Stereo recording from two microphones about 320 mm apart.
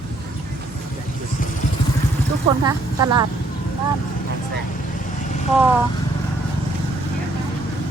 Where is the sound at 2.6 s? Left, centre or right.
Centre.